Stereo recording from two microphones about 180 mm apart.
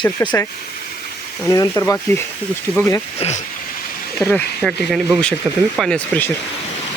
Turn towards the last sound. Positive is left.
turn(degrees=5)  # may be behind; listen again after turning